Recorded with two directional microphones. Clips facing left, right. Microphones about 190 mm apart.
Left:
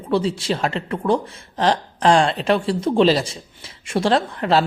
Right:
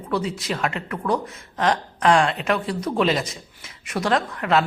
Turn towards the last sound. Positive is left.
turn(degrees=30)  # may be behind; listen again after turning